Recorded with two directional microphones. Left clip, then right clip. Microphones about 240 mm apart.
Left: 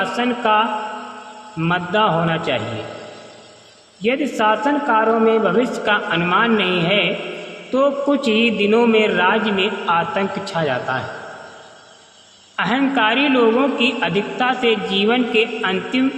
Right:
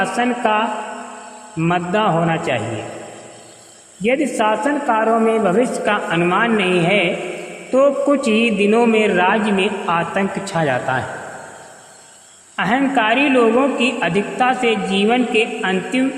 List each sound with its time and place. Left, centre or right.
0.0 s a man's voice: right
4.0 s a man's voice: right
12.5 s a man's voice: right